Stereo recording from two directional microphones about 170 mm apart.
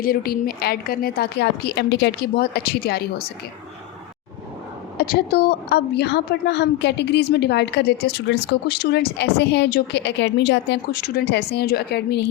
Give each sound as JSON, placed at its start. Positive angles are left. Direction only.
{"t": 0.0, "sound": "a woman's voice", "side_deg": 60}
{"t": 4.9, "sound": "a woman's voice", "side_deg": 65}